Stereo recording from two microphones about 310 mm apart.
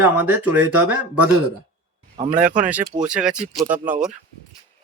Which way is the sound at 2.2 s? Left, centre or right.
Centre.